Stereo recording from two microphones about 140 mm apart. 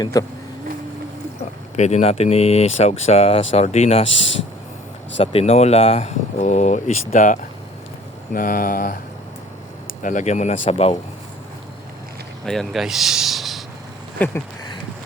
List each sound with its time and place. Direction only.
0.0 s speech: 25° left (ahead or behind)
1.7 s speech: 50° left (ahead or behind)
5.1 s speech: 45° left (ahead or behind); by 7.3 s 60° left (ahead or behind)
8.3 s speech: 90° left
10.0 s speech: 65° left (ahead or behind); by 10.9 s 50° left (ahead or behind)
12.5 s speech: centre (ahead or behind)